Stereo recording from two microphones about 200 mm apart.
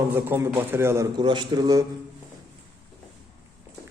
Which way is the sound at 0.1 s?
10° right (ahead or behind).